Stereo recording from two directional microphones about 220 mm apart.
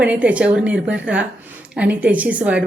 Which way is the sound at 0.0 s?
5° right (ahead or behind).